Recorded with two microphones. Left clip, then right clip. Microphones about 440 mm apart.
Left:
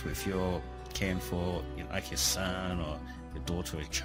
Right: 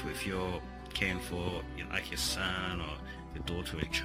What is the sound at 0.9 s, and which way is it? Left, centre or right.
Speech, left.